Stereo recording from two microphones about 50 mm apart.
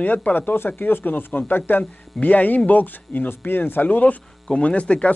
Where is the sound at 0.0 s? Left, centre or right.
Left.